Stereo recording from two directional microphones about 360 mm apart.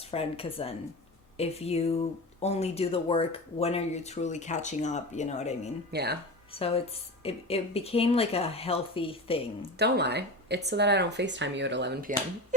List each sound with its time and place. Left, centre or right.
0.1 s speech: centre
5.9 s speech: right
6.5 s speech: centre
9.7 s speech: right